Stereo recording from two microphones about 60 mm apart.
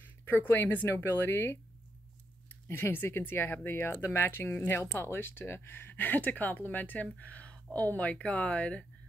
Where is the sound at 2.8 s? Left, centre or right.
Left.